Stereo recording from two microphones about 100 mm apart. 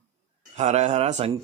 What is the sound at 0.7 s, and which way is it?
Speech, 90° right.